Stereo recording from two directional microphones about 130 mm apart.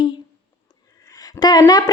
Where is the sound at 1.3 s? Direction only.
30° left (ahead or behind).